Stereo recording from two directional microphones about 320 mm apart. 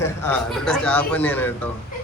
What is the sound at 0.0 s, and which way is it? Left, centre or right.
Speech, centre.